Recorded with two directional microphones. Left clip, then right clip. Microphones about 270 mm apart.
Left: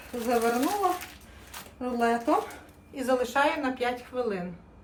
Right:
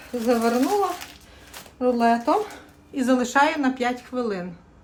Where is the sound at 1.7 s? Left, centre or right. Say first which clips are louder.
Right 7 dB; right.